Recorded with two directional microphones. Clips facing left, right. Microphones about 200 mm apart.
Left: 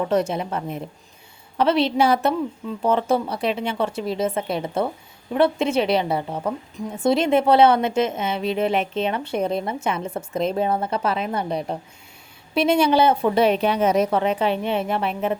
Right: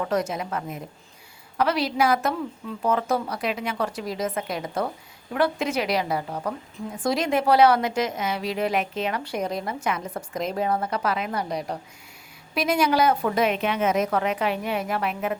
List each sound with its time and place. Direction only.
0.1 s a woman's voice: 30° left (ahead or behind)